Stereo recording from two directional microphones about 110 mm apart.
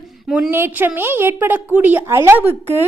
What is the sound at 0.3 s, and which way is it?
Speech, 5° right (ahead or behind).